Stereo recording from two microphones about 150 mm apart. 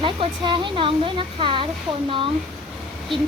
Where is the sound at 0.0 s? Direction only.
35° right (ahead or behind).